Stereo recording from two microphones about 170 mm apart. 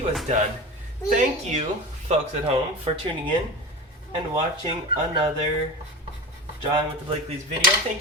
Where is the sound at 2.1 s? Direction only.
40° right (ahead or behind).